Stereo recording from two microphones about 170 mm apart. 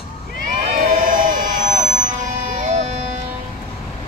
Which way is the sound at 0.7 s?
50° right (ahead or behind).